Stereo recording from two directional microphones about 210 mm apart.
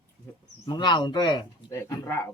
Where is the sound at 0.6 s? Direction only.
20° left (ahead or behind).